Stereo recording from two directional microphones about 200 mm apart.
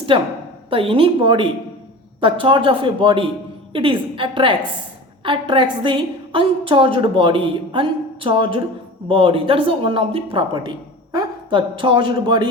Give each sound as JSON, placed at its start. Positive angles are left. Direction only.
{"t": 0.1, "sound": "a woman's voice", "side_deg": -25}